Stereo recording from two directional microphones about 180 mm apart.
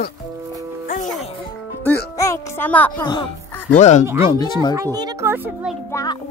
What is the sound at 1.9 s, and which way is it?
Speech, 15° left (ahead or behind).